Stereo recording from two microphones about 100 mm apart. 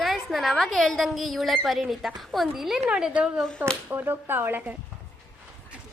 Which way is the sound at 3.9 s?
20° right (ahead or behind).